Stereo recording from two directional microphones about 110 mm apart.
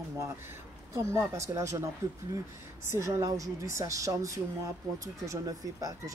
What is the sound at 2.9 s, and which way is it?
Speech, 30° right (ahead or behind).